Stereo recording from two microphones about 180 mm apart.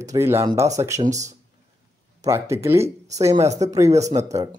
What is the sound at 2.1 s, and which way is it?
Speech, 15° right (ahead or behind).